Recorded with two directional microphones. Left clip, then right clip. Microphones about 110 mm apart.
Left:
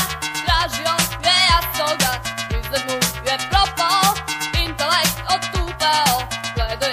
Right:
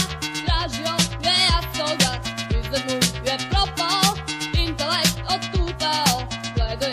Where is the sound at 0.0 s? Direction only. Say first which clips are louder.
Left 4 dB; 25° right (ahead or behind).